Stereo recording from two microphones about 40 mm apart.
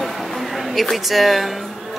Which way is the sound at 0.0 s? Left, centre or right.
Centre.